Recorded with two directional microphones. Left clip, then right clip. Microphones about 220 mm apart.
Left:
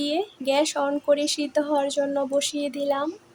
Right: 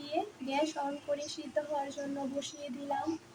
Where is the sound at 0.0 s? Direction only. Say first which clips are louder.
Left 11 dB; 55° left (ahead or behind).